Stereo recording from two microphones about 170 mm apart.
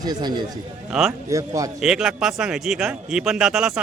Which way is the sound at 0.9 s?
5° right (ahead or behind).